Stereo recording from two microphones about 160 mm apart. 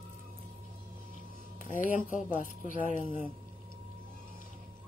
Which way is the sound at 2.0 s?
55° left (ahead or behind).